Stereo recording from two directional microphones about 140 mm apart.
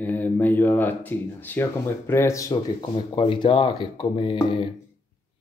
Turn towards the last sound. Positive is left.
turn(degrees=35)  # may be behind; listen again after turning